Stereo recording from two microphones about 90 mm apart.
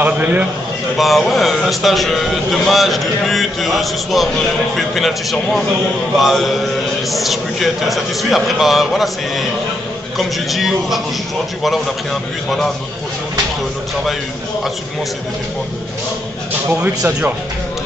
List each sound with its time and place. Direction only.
0.0 s a man's voice: 15° right (ahead or behind)
0.9 s a man's voice: centre (ahead or behind)
16.6 s speech: 15° right (ahead or behind)